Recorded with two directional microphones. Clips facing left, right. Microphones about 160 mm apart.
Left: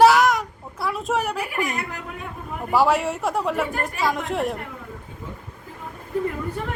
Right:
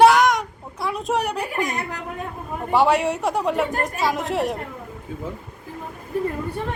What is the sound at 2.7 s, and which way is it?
Speech, centre (ahead or behind).